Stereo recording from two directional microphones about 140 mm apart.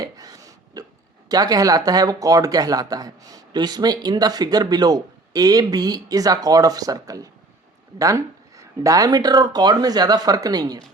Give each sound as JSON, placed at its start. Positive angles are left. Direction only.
{"t": 0.0, "sound": "hiccup", "side_deg": -25}
{"t": 1.3, "sound": "speech", "side_deg": -25}